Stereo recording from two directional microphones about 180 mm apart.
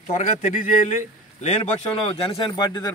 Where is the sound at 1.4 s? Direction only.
35° left (ahead or behind).